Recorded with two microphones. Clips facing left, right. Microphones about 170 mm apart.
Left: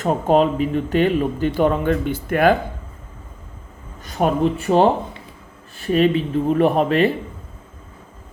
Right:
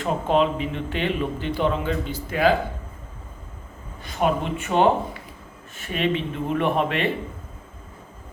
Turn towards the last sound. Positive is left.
turn(degrees=40)  # may be behind; listen again after turning